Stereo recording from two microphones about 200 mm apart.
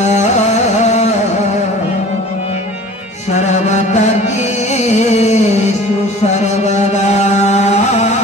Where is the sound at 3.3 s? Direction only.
35° left (ahead or behind).